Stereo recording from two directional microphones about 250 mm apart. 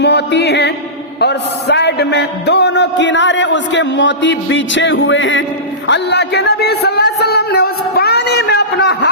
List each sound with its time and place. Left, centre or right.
0.0 s music: left
1.2 s a man's voice: left